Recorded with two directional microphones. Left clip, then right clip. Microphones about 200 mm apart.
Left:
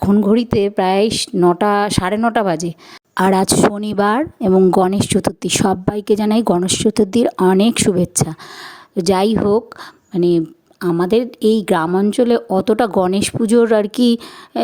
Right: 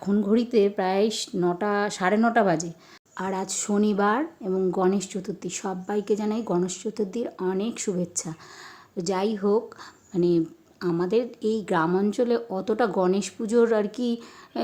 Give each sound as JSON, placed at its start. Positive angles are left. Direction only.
{"t": 0.0, "sound": "speech", "side_deg": 40}
{"t": 11.9, "sound": "speech", "side_deg": 35}